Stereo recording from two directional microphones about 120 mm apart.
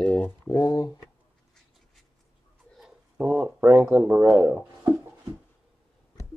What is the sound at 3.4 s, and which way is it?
Speech, 15° right (ahead or behind).